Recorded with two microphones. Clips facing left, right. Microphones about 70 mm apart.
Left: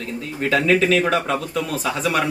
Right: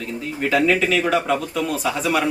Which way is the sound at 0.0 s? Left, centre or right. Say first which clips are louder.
Even; centre.